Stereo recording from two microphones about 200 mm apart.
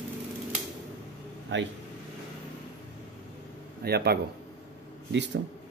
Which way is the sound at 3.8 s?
50° right (ahead or behind).